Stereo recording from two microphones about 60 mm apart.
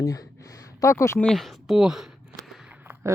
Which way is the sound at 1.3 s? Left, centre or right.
Centre.